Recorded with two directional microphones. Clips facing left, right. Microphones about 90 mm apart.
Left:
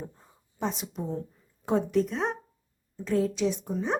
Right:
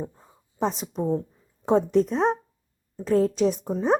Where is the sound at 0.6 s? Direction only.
35° right (ahead or behind).